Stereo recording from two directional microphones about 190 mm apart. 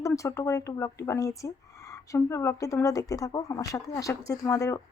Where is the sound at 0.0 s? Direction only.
15° left (ahead or behind).